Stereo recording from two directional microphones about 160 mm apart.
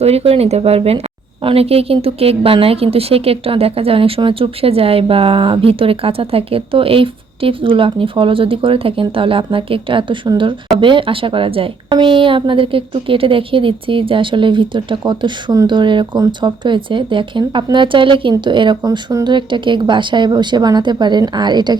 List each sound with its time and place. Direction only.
0.0 s a woman's voice: 40° right (ahead or behind)